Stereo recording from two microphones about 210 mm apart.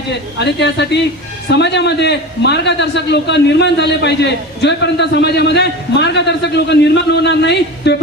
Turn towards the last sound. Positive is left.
turn(degrees=55)  # may be behind; listen again after turning